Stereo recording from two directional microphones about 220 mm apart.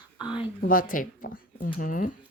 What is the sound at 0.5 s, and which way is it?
Speech, 40° left (ahead or behind).